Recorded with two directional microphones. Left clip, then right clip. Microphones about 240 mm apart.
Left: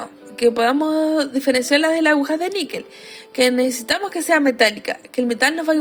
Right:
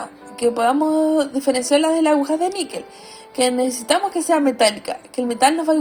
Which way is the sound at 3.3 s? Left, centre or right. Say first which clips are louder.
Left 2 dB; left.